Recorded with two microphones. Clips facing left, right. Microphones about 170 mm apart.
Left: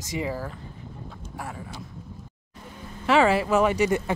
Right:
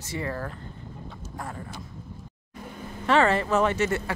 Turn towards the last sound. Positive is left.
turn(degrees=15)  # may be behind; listen again after turning